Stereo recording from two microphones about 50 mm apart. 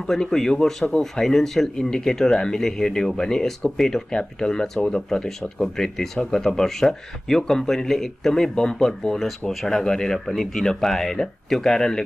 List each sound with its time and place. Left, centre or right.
0.0 s speech: centre
1.2 s speech: centre